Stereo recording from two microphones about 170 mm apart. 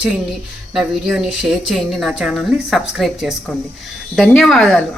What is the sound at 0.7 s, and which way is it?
A woman's voice, 5° right (ahead or behind).